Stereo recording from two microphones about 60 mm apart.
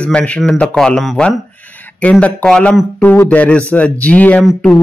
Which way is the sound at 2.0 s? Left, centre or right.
Left.